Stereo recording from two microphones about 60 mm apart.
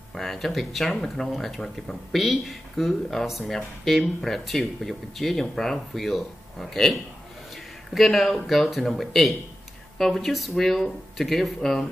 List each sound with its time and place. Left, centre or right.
0.1 s speech: centre